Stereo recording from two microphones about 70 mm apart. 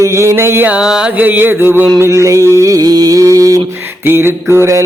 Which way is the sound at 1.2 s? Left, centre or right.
Right.